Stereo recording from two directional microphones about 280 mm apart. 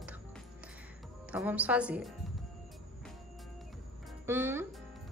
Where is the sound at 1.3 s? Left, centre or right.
Centre.